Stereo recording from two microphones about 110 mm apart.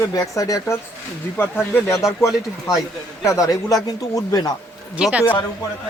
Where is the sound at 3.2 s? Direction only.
30° left (ahead or behind).